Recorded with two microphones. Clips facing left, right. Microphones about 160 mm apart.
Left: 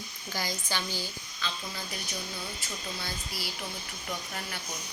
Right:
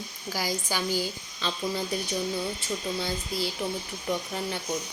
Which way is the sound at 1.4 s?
30° right (ahead or behind).